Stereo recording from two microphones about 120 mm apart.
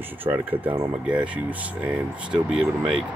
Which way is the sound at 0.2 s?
15° right (ahead or behind).